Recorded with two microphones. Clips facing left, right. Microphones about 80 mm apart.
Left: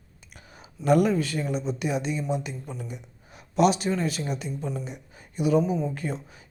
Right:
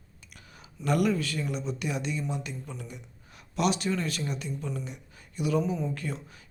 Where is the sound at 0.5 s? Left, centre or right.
Left.